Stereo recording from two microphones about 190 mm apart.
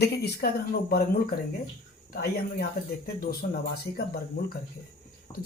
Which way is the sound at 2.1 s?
55° left (ahead or behind).